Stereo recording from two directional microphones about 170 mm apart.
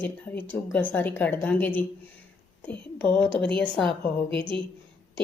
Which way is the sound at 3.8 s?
Centre (ahead or behind).